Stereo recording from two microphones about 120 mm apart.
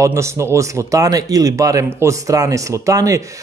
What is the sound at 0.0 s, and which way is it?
Speech, 25° right (ahead or behind).